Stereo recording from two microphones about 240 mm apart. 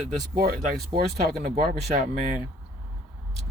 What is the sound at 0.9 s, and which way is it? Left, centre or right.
Speech, right.